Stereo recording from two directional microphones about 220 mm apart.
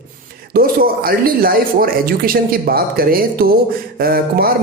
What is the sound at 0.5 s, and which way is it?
Speech, 40° right (ahead or behind).